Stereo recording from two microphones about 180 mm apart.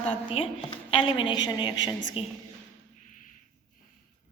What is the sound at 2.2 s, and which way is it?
Speech, 35° left (ahead or behind).